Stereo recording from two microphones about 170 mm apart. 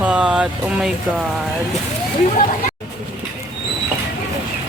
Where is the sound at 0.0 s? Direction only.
5° right (ahead or behind).